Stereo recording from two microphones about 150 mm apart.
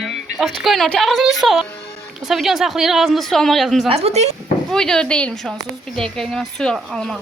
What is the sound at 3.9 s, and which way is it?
Speech, 45° right (ahead or behind).